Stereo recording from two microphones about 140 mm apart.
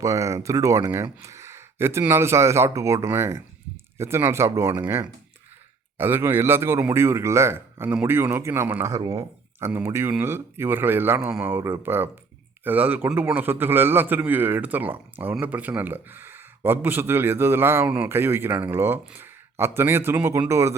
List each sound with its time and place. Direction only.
0.0 s a man's voice: 20° right (ahead or behind)